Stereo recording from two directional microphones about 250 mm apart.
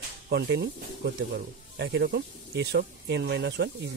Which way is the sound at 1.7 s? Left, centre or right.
Right.